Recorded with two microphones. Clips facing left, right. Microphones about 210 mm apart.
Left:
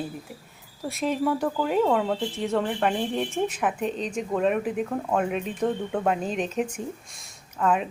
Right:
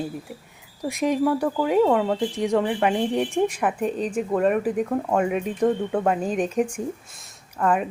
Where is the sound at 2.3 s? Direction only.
15° right (ahead or behind).